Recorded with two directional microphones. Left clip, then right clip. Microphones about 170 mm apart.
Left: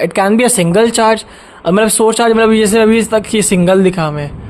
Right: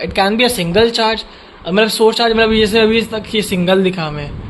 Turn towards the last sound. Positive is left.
turn(degrees=40)  # may be behind; listen again after turning